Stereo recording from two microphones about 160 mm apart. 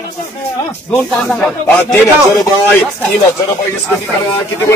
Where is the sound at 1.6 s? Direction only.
15° left (ahead or behind).